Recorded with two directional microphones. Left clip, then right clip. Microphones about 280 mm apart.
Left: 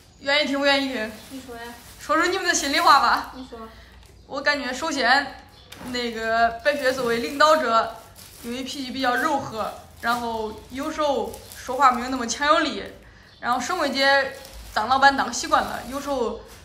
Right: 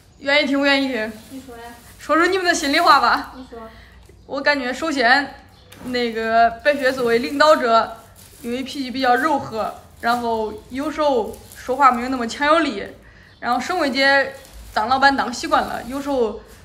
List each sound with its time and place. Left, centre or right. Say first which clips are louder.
0.2 s speech: right 4 dB; centre